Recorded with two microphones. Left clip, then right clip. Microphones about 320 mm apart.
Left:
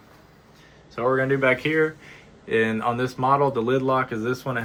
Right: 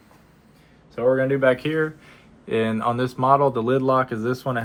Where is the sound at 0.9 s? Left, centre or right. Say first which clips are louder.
Right 2 dB; centre.